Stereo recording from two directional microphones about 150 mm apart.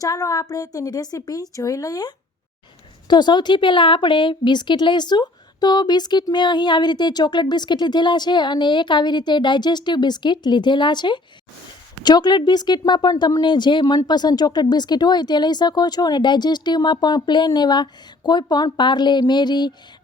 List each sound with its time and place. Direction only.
0.0 s a woman's voice: 25° left (ahead or behind)